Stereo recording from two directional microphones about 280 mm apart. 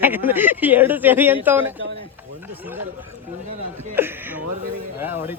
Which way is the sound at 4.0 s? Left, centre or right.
Centre.